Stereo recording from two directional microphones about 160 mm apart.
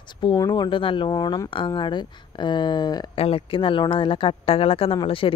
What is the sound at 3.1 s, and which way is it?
Speech, 35° left (ahead or behind).